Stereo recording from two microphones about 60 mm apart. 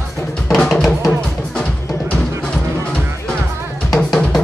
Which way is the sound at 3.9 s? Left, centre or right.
Centre.